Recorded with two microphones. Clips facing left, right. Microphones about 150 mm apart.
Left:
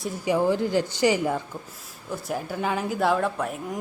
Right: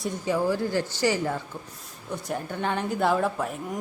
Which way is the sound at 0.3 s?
20° left (ahead or behind).